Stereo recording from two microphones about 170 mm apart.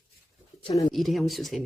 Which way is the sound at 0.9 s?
Centre (ahead or behind).